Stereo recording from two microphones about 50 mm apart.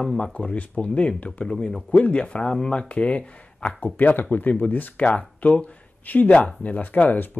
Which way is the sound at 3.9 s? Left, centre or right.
Left.